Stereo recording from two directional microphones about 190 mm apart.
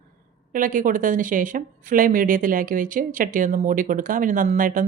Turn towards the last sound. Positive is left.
turn(degrees=-45)  # may be behind; listen again after turning